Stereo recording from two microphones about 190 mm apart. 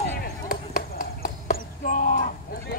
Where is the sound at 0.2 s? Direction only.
50° left (ahead or behind).